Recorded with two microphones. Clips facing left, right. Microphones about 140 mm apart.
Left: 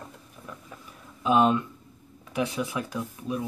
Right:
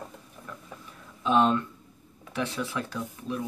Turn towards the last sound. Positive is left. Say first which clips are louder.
# left 2 dB
turn(degrees=15)  # may be behind; listen again after turning